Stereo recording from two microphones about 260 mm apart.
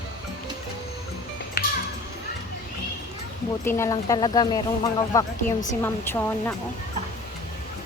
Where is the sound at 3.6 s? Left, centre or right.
Centre.